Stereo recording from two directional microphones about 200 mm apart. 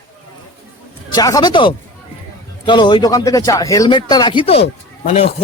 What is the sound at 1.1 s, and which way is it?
Speech, 20° left (ahead or behind).